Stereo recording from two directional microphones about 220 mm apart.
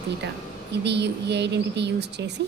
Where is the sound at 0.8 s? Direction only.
50° right (ahead or behind).